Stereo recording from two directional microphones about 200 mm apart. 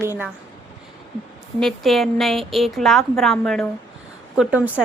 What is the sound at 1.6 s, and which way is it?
A woman's voice, centre (ahead or behind).